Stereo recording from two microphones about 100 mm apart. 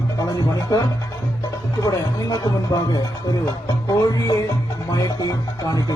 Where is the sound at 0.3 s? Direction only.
40° left (ahead or behind).